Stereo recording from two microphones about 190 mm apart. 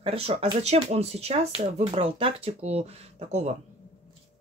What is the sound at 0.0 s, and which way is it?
Speech, 30° right (ahead or behind).